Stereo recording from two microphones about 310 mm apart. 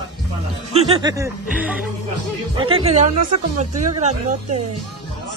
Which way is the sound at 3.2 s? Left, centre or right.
Right.